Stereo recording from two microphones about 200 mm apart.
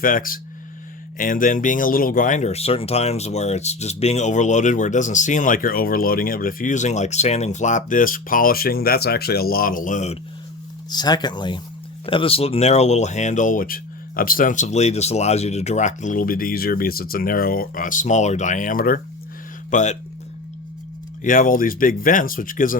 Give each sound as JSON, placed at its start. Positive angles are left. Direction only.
{"t": 0.0, "sound": "speech", "side_deg": 45}
{"t": 10.8, "sound": "speech", "side_deg": 20}
{"t": 21.2, "sound": "speech", "side_deg": 40}